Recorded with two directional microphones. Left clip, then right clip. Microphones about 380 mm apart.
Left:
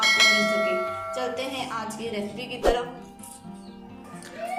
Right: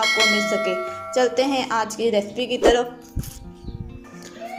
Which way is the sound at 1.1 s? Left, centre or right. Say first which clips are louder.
Right 10 dB; right.